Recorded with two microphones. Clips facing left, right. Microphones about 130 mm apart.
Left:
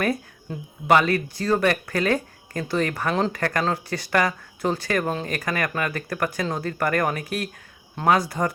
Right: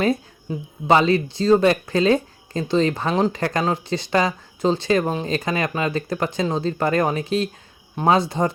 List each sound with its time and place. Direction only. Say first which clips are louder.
0.5 s speech: right 5 dB; 10° right (ahead or behind)
0.9 s speech: right 2 dB; 25° right (ahead or behind)